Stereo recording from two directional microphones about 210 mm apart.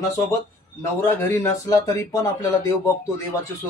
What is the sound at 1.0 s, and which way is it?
Speech, 10° left (ahead or behind).